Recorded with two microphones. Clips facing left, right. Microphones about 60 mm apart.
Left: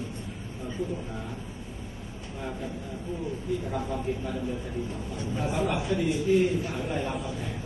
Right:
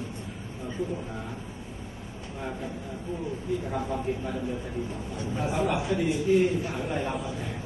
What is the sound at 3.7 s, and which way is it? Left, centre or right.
Speech, centre.